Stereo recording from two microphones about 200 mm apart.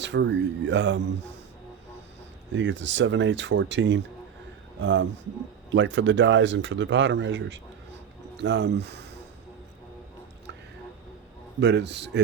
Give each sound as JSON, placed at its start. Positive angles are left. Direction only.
{"t": 0.0, "sound": "speech", "side_deg": -60}
{"t": 2.5, "sound": "speech", "side_deg": -65}
{"t": 11.6, "sound": "speech", "side_deg": -60}